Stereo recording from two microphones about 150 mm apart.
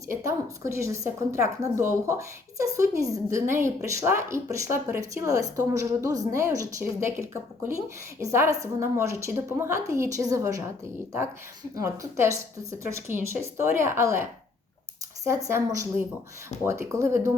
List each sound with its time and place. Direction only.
0.1 s a woman's voice: 20° right (ahead or behind)
11.7 s a woman's voice: 20° right (ahead or behind)
15.4 s a woman's voice: 20° right (ahead or behind)